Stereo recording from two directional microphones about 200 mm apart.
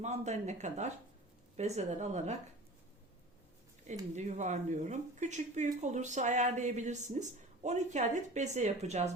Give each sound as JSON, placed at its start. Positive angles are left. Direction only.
{"t": 0.0, "sound": "speech", "side_deg": -35}
{"t": 4.1, "sound": "speech", "side_deg": -35}